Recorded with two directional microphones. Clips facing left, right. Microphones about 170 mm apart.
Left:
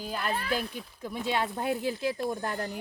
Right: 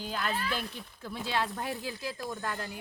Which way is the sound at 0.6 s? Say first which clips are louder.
Left 3 dB; centre (ahead or behind).